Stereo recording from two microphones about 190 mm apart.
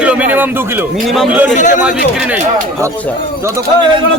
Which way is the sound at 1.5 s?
40° left (ahead or behind).